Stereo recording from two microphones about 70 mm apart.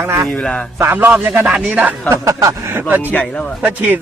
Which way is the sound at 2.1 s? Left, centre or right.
Right.